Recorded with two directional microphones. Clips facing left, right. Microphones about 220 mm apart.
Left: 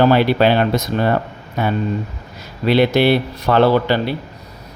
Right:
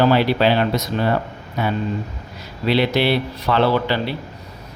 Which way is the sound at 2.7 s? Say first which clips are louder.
Left 4 dB; 50° left (ahead or behind).